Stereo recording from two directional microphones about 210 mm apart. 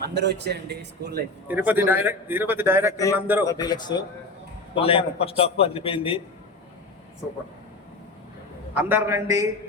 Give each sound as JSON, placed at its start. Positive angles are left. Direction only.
{"t": 0.0, "sound": "speech", "side_deg": -55}
{"t": 1.5, "sound": "a man's voice", "side_deg": -10}
{"t": 3.4, "sound": "a man's voice", "side_deg": 15}
{"t": 8.7, "sound": "a man's voice", "side_deg": -10}